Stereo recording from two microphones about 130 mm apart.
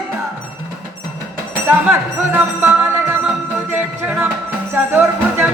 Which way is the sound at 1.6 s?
15° right (ahead or behind).